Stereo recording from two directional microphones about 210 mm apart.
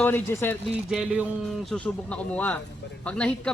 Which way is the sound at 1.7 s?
5° left (ahead or behind).